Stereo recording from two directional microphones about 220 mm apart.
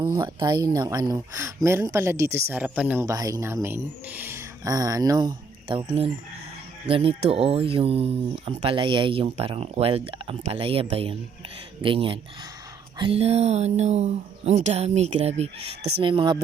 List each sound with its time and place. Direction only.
0.0 s speech: 20° right (ahead or behind)